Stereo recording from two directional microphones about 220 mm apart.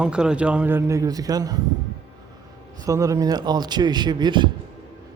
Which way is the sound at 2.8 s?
15° right (ahead or behind).